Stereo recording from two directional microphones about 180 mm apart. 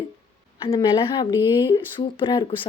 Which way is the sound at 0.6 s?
30° left (ahead or behind).